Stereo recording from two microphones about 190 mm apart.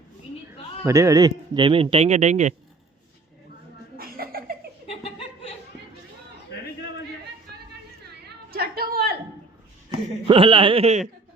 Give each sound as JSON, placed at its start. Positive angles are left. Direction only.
{"t": 0.9, "sound": "a man's voice", "side_deg": -15}
{"t": 3.9, "sound": "cough", "side_deg": -50}
{"t": 4.9, "sound": "chuckle", "side_deg": 30}
{"t": 8.4, "sound": "a sound", "side_deg": -55}
{"t": 10.2, "sound": "a man's voice", "side_deg": -25}